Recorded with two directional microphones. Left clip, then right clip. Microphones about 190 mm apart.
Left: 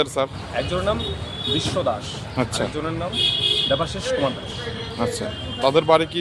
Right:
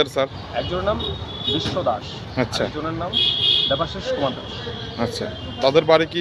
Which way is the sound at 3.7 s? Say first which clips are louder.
Even; 25° left (ahead or behind).